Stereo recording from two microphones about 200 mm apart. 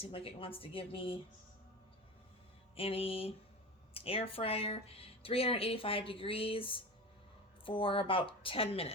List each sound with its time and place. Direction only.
0.0 s speech: 30° left (ahead or behind)
2.7 s speech: 30° left (ahead or behind)